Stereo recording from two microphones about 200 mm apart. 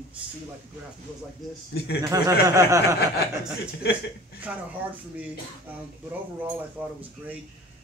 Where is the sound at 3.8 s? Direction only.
55° left (ahead or behind).